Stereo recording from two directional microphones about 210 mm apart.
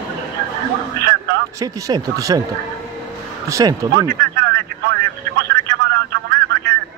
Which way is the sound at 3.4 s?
15° right (ahead or behind).